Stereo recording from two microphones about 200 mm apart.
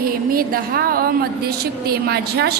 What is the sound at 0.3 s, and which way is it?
A woman's voice, 45° right (ahead or behind).